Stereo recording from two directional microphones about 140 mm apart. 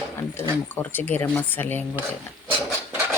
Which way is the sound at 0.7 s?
15° left (ahead or behind).